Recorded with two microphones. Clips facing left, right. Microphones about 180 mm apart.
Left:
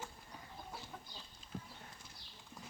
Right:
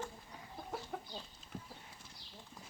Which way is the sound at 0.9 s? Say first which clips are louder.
Right 8 dB; 60° right (ahead or behind).